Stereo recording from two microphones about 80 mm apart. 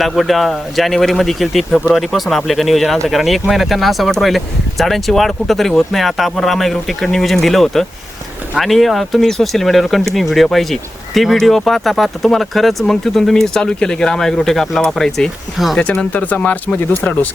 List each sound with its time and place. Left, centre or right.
0.0 s speech: centre
15.8 s speech: centre